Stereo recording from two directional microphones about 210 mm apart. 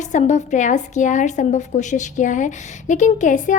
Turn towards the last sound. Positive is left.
turn(degrees=40)  # may be behind; listen again after turning